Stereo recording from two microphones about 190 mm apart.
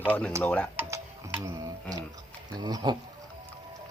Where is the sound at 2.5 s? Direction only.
20° right (ahead or behind).